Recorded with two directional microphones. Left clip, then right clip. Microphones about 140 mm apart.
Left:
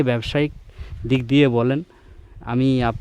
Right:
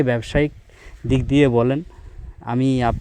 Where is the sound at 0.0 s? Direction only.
10° left (ahead or behind).